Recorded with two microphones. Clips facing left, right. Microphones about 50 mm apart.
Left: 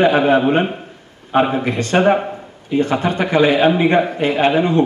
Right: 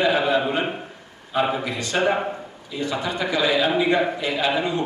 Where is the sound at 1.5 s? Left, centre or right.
Left.